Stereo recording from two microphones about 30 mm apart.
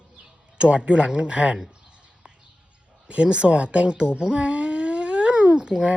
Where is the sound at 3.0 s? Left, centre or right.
Right.